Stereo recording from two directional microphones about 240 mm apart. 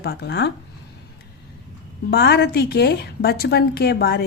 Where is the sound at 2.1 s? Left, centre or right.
Left.